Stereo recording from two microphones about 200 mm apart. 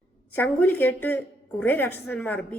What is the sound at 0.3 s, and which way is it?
A woman's voice, 10° left (ahead or behind).